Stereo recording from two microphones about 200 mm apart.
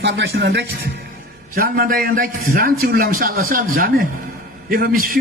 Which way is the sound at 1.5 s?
45° right (ahead or behind).